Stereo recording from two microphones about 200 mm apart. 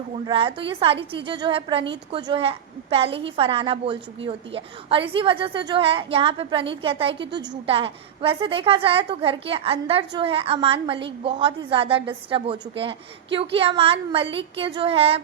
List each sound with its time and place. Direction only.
0.3 s a woman's voice: 25° right (ahead or behind)